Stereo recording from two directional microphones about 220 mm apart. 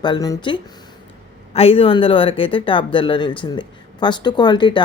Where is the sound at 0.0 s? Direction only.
20° left (ahead or behind).